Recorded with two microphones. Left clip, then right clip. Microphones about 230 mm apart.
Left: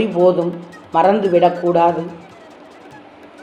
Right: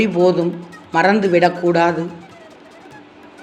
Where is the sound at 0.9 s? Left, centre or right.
Right.